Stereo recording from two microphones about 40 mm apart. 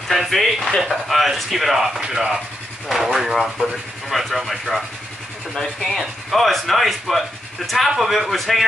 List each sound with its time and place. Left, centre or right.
0.1 s speech: centre
2.0 s speech: right
2.9 s speech: centre